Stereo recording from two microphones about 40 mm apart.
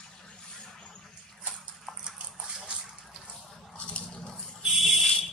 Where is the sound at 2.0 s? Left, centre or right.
Right.